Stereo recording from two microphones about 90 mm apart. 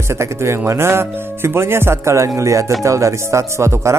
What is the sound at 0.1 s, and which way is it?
Speech, 30° right (ahead or behind).